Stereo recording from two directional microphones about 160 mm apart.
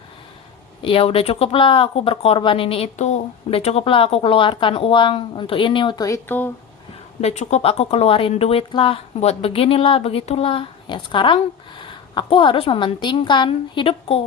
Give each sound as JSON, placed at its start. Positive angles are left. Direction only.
{"t": 0.8, "sound": "speech", "side_deg": 35}
{"t": 6.2, "sound": "speech", "side_deg": 10}
{"t": 7.2, "sound": "speech", "side_deg": 45}